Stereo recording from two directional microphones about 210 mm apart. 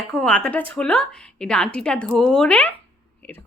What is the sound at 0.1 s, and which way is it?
Speech, 5° left (ahead or behind).